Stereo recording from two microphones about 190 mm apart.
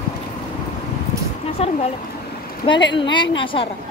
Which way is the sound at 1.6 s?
30° left (ahead or behind).